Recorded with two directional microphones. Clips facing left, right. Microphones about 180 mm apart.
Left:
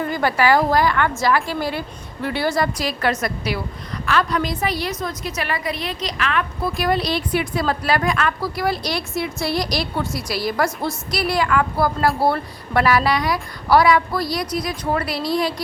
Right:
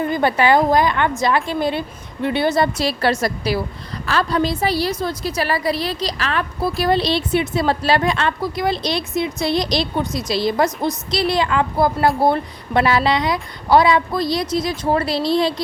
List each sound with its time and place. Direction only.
0.1 s a woman's voice: 25° right (ahead or behind)